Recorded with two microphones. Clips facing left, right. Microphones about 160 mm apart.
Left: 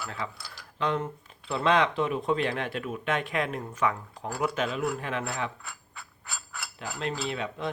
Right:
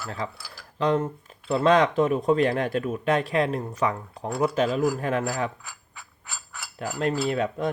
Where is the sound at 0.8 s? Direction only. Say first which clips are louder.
Right 6 dB; 40° right (ahead or behind).